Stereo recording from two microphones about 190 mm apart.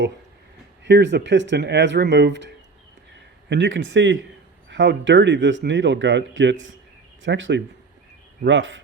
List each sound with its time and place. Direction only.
0.9 s speech: 70° right (ahead or behind)
3.5 s speech: 75° right (ahead or behind)